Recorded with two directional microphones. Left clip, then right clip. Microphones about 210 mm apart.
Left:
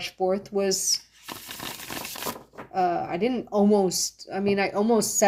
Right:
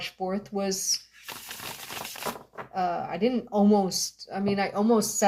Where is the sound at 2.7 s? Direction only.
50° left (ahead or behind).